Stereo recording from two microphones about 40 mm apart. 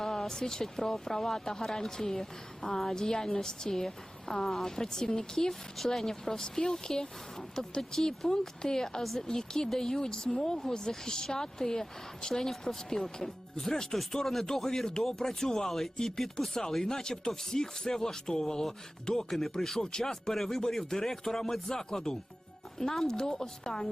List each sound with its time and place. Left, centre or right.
0.0 s speech: centre